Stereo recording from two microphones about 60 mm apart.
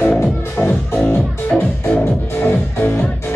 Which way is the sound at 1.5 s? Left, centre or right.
Centre.